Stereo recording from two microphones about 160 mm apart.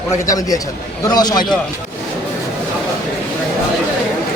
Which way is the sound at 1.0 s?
25° left (ahead or behind).